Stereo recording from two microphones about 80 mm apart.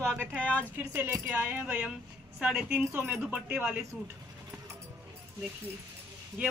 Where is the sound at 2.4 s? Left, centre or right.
Centre.